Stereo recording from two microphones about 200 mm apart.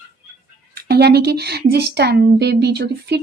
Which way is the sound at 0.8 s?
55° right (ahead or behind).